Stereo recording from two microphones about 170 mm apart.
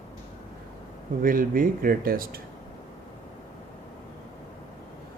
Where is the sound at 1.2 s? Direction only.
55° right (ahead or behind).